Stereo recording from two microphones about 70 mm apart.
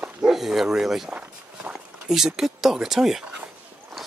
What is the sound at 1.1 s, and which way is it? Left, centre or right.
Vehicle, centre.